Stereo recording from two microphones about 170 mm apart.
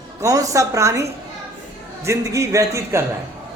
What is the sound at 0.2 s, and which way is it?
A woman's voice, 20° right (ahead or behind).